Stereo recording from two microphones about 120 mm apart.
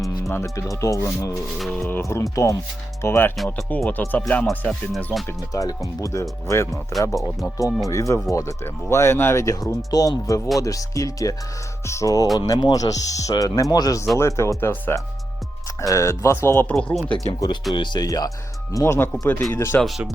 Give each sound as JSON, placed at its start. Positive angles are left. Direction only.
{"t": 0.0, "sound": "speech", "side_deg": 25}
{"t": 1.7, "sound": "speech", "side_deg": 10}
{"t": 2.0, "sound": "speech", "side_deg": 25}
{"t": 3.3, "sound": "speech", "side_deg": 0}
{"t": 3.8, "sound": "speech", "side_deg": 15}
{"t": 5.5, "sound": "speech", "side_deg": 30}
{"t": 7.2, "sound": "speech", "side_deg": 0}
{"t": 7.9, "sound": "speech", "side_deg": 25}
{"t": 16.7, "sound": "speech", "side_deg": 0}
{"t": 17.7, "sound": "speech", "side_deg": 40}
{"t": 19.8, "sound": "speech", "side_deg": 0}